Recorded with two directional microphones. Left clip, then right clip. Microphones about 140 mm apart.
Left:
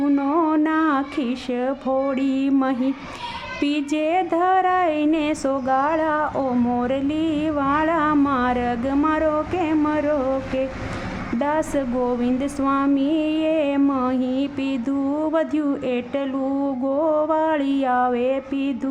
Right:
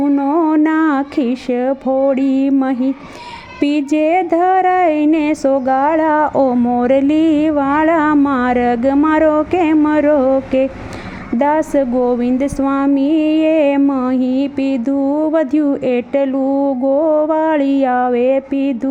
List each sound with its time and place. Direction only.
0.0 s a sound: 35° right (ahead or behind)
2.5 s mantra: 35° right (ahead or behind)
6.7 s music: 40° right (ahead or behind)
11.3 s mantra: 40° right (ahead or behind)